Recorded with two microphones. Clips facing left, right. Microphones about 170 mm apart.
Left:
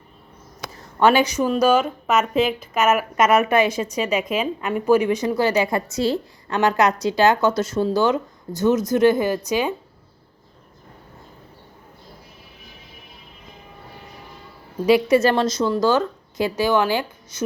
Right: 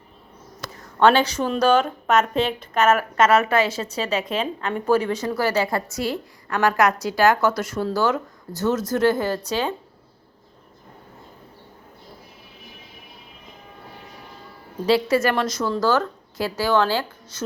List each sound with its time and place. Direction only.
0.6 s a woman's voice: 10° left (ahead or behind)
14.8 s a woman's voice: 15° left (ahead or behind)